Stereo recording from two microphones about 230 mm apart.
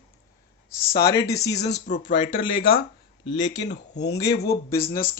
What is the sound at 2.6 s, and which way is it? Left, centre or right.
Speech, left.